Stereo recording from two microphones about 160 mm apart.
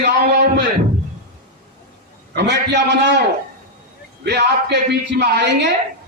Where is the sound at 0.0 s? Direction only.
90° right.